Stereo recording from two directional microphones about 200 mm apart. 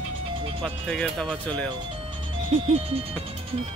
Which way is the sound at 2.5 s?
30° right (ahead or behind).